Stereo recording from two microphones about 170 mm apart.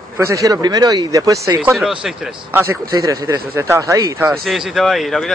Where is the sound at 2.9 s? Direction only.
20° right (ahead or behind).